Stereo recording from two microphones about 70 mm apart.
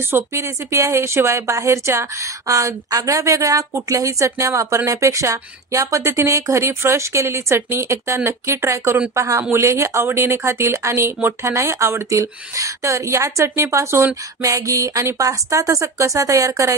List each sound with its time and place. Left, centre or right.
0.0 s speech: right
14.4 s speech: right